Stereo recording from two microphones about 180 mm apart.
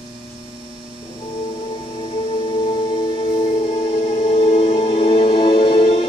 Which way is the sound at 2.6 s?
30° left (ahead or behind).